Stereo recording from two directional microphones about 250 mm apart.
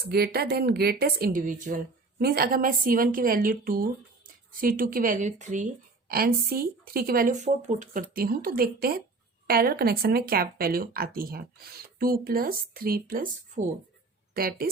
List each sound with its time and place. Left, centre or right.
0.1 s speech: right